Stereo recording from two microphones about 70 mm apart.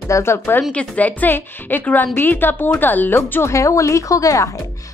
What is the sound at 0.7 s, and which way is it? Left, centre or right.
A woman's voice, centre.